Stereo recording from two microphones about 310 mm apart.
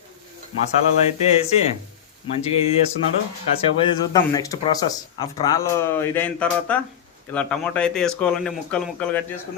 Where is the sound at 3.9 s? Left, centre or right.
Centre.